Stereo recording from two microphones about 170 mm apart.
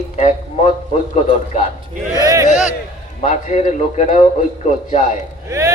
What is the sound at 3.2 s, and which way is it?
A man's voice, 45° left (ahead or behind).